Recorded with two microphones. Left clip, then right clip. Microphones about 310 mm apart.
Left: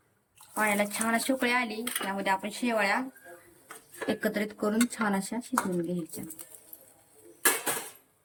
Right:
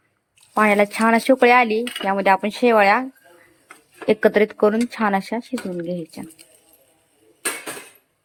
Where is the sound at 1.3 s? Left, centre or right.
Centre.